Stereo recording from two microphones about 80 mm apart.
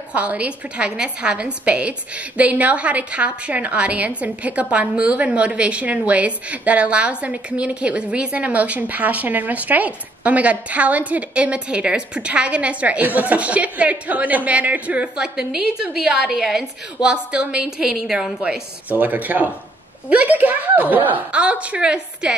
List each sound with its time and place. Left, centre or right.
0.1 s a woman's voice: centre
18.9 s speech: right